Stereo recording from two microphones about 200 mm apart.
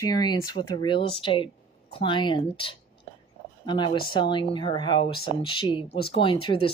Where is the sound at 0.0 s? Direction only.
20° left (ahead or behind).